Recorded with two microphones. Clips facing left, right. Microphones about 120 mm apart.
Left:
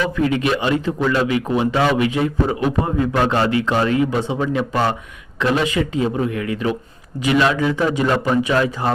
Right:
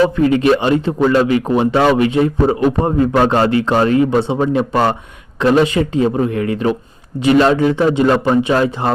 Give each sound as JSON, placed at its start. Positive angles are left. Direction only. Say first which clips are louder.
{"t": 0.0, "sound": "speech", "louder": "right 6 dB", "side_deg": -35}